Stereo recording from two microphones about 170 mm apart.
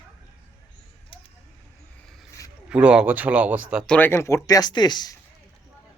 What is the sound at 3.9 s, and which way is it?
Speech, 15° left (ahead or behind).